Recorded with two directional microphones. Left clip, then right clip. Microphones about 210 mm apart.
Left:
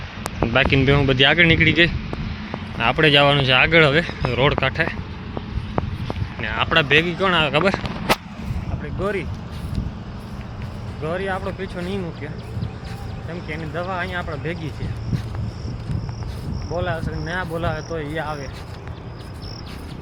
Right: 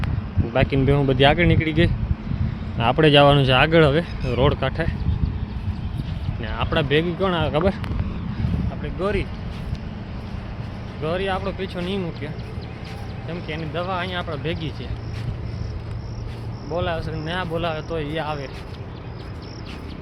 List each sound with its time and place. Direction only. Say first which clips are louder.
0.5 s speech: left 3 dB; centre (ahead or behind)
2.7 s speech: even; 20° right (ahead or behind)
6.4 s speech: left 5 dB; 10° right (ahead or behind)
8.8 s a sound: even; 5° right (ahead or behind)
11.0 s speech: right 1 dB; 10° right (ahead or behind)
13.5 s speech: even; 5° right (ahead or behind)
16.7 s speech: even; centre (ahead or behind)